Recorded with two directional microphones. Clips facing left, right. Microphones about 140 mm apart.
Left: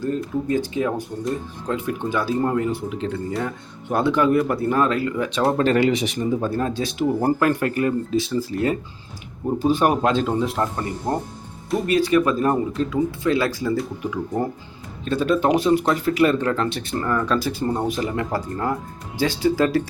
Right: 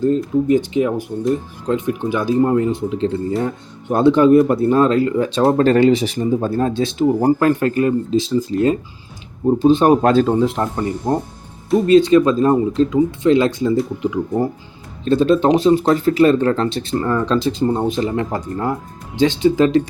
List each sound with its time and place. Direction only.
0.0 s speech: 20° right (ahead or behind)
10.0 s speech: 40° right (ahead or behind)
10.4 s speech: 25° right (ahead or behind)
15.0 s speech: 30° right (ahead or behind)